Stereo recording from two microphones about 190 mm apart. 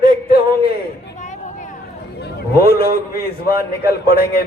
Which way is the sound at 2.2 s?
55° left (ahead or behind).